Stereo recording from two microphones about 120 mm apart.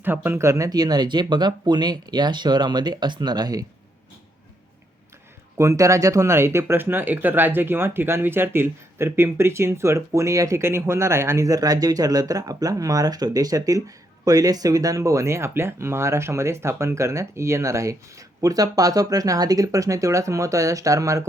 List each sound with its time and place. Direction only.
0.0 s speech: 15° right (ahead or behind); by 3.7 s 35° right (ahead or behind)
5.5 s speech: 25° right (ahead or behind)